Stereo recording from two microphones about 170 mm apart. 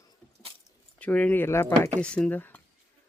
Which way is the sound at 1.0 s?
10° left (ahead or behind).